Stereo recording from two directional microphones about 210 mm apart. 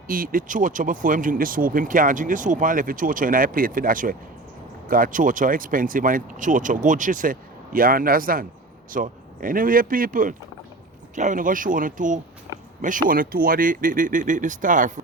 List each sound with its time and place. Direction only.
0.1 s speech: 40° right (ahead or behind)